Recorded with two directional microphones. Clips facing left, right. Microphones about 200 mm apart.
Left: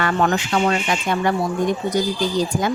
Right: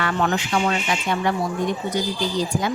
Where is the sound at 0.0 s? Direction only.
45° left (ahead or behind).